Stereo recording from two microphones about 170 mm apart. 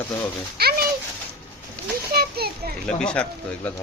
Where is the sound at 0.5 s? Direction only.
65° right (ahead or behind).